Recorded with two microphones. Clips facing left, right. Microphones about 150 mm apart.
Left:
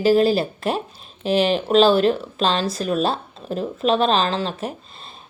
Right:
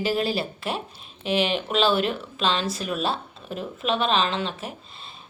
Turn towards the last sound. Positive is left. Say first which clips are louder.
# left 4 dB
turn(degrees=40)  # may be behind; listen again after turning